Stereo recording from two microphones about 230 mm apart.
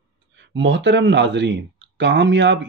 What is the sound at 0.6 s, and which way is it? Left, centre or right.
Speech, right.